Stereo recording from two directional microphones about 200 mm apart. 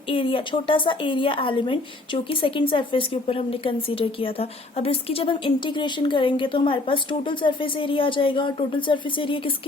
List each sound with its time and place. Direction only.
0.1 s a woman's voice: 25° left (ahead or behind)